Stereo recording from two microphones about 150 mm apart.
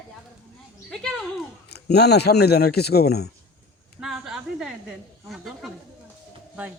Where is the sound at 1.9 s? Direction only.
90° left.